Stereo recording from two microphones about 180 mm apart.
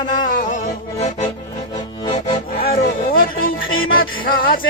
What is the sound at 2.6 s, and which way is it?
Music, 55° left (ahead or behind).